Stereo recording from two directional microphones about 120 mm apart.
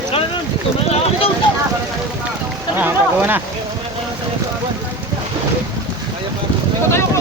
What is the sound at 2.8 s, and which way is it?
Speech, 15° right (ahead or behind).